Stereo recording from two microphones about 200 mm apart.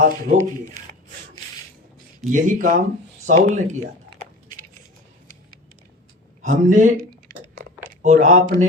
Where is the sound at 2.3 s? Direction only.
40° right (ahead or behind).